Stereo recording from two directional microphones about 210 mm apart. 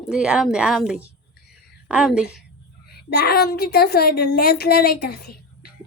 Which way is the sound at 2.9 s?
50° left (ahead or behind).